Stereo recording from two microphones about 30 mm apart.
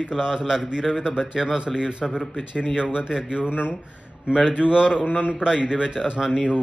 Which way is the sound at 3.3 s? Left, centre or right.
Right.